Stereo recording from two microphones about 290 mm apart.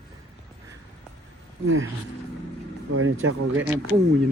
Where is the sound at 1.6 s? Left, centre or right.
Right.